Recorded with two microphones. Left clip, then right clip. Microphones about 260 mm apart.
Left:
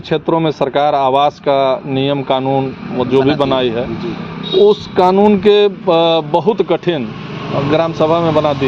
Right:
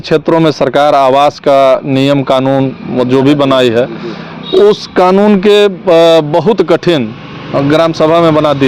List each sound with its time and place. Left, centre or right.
0.1 s speech: right